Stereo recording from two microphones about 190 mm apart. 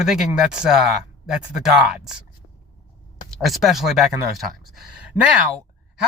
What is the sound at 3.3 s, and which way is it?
Speech, centre (ahead or behind).